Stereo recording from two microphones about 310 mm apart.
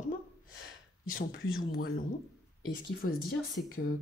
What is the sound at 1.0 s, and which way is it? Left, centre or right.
Speech, left.